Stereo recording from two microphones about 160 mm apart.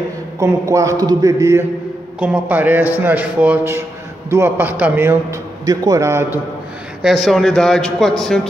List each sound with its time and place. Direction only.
0.4 s a man's voice: 20° right (ahead or behind)
7.0 s speech: centre (ahead or behind)